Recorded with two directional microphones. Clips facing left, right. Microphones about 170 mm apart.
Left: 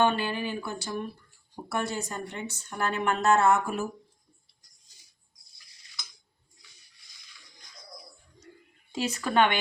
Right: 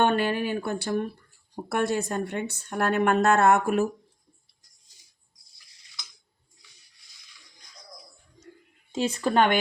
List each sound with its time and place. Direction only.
0.0 s a woman's voice: 55° right (ahead or behind)
8.9 s speech: 25° right (ahead or behind)